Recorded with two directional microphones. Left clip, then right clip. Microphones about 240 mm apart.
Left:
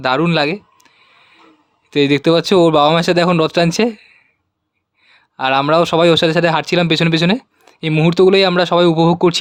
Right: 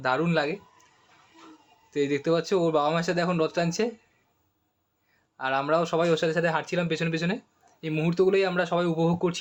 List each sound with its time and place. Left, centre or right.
0.0 s speech: left
1.9 s speech: left
5.4 s speech: left